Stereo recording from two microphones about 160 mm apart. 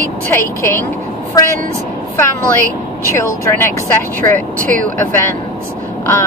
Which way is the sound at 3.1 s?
15° left (ahead or behind).